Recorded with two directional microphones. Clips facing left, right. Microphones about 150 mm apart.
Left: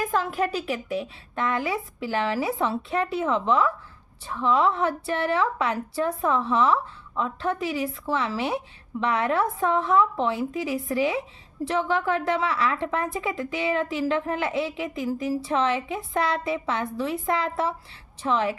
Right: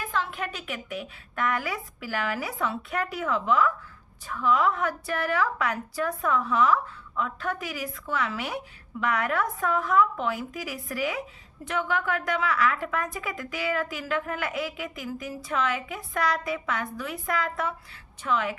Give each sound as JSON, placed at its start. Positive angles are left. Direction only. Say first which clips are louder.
{"t": 0.0, "sound": "a woman's voice", "louder": "left 6 dB", "side_deg": 45}